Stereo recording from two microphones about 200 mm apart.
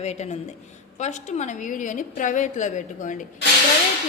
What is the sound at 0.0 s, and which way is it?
A woman's voice, 35° left (ahead or behind).